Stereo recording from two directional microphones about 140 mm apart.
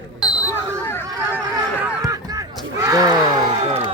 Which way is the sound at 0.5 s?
15° left (ahead or behind).